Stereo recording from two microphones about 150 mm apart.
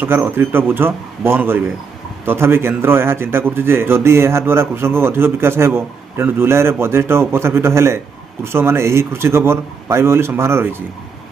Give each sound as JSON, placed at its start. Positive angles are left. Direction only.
{"t": 0.0, "sound": "a man's voice", "side_deg": -15}